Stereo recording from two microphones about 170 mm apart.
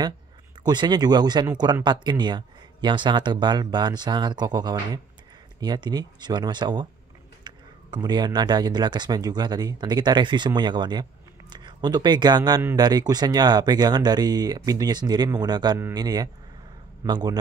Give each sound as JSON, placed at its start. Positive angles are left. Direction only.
{"t": 0.7, "sound": "speech", "side_deg": -25}